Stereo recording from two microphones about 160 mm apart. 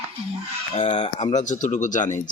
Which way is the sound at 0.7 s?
40° left (ahead or behind).